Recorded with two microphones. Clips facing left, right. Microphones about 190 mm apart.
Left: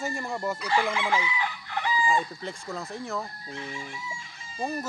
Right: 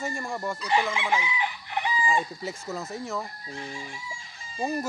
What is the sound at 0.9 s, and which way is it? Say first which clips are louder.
Chicken: even; 20° right (ahead or behind).